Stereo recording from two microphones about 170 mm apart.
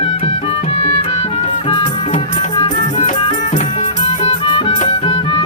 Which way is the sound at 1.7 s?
30° left (ahead or behind).